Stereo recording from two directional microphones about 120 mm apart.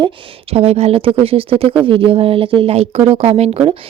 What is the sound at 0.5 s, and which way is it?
Speech, 60° right (ahead or behind).